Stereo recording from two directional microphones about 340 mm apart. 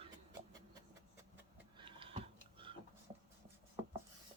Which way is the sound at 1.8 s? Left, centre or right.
Centre.